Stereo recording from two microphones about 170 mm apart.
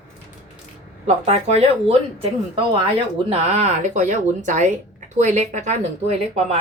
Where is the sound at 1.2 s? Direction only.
35° right (ahead or behind).